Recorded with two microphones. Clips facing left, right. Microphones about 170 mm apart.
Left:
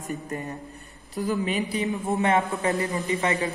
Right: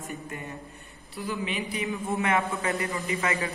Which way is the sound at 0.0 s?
40° left (ahead or behind).